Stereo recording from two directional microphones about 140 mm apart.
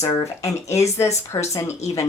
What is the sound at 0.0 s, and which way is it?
Speech, 25° left (ahead or behind).